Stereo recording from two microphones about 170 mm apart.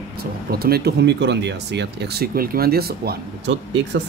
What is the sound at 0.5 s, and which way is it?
Speech, 65° right (ahead or behind).